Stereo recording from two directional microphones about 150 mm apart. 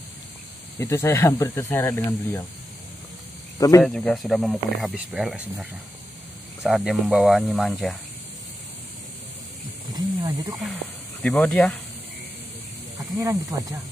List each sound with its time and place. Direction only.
0.7 s speech: 20° left (ahead or behind)
3.5 s speech: 25° left (ahead or behind)
3.8 s speech: 5° left (ahead or behind)
9.9 s speech: 25° right (ahead or behind)
11.2 s speech: 10° left (ahead or behind)
13.2 s speech: 25° right (ahead or behind)